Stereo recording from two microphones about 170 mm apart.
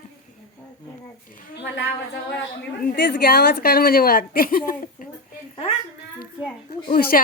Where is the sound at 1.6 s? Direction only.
90° left.